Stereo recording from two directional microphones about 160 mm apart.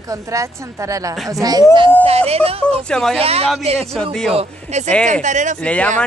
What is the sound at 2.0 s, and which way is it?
Speech, 40° right (ahead or behind).